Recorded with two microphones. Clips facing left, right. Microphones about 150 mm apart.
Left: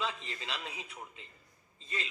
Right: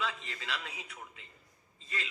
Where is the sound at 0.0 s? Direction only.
25° left (ahead or behind).